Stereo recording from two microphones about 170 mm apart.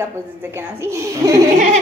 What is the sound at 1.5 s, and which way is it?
Giggle, 45° right (ahead or behind).